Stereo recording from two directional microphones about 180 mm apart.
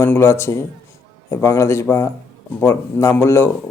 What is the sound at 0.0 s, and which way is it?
Speech, 15° left (ahead or behind).